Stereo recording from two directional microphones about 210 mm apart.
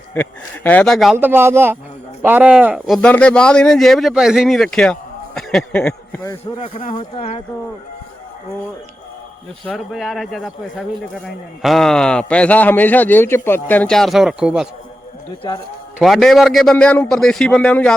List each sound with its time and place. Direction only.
0.1 s speech: 10° left (ahead or behind)
6.6 s speech: 35° left (ahead or behind)
9.6 s speech: centre (ahead or behind)
15.4 s speech: 20° left (ahead or behind)
16.0 s speech: centre (ahead or behind)